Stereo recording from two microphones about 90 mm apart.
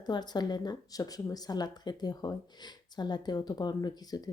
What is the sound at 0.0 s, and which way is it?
Speech, 50° left (ahead or behind).